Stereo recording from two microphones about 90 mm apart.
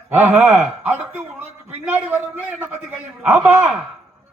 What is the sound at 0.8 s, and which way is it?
A man's voice, 20° right (ahead or behind).